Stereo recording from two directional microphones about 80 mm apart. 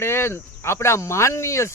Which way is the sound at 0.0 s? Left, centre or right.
Left.